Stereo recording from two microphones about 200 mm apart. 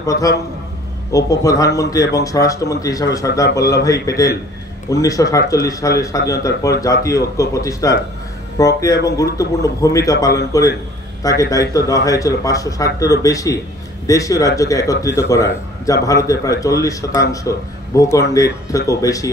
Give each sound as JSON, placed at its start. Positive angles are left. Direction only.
{"t": 0.0, "sound": "a man's voice", "side_deg": 15}